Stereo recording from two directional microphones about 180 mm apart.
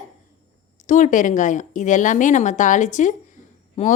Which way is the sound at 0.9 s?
45° left (ahead or behind).